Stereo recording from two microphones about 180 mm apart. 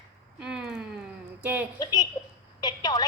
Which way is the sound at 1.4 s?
10° right (ahead or behind).